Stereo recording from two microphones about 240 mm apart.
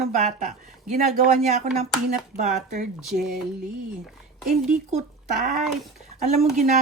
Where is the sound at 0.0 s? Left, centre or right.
Right.